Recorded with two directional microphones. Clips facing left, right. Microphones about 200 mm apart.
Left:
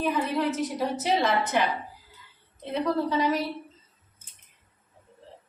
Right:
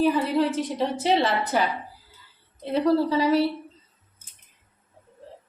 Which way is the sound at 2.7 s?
30° right (ahead or behind).